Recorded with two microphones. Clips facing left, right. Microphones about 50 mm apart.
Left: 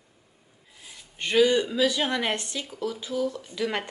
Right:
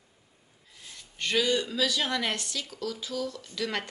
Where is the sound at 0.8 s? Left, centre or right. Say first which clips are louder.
Left 1 dB; centre.